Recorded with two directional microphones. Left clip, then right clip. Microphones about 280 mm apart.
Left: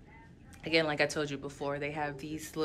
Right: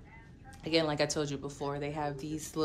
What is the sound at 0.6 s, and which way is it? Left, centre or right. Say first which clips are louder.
Speech: left 1 dB; centre.